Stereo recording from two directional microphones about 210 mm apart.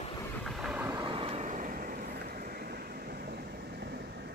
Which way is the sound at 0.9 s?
20° right (ahead or behind).